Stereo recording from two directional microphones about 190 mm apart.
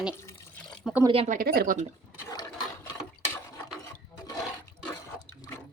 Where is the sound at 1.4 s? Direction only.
50° right (ahead or behind).